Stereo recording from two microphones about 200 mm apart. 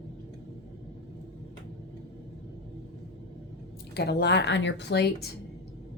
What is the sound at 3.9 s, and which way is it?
A woman's voice, 55° left (ahead or behind).